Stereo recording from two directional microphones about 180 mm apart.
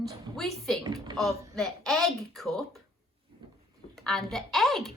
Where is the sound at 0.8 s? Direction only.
25° right (ahead or behind).